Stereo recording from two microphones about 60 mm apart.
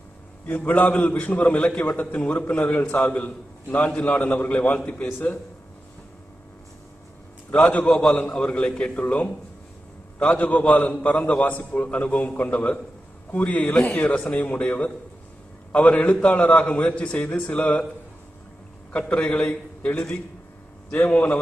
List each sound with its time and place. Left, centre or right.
0.5 s a man's voice: left
7.5 s a man's voice: left
18.9 s a man's voice: left